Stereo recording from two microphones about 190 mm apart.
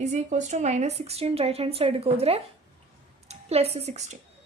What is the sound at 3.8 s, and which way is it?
Speech, 35° right (ahead or behind).